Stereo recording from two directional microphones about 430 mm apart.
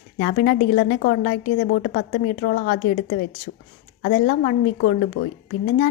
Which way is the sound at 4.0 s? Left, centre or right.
Left.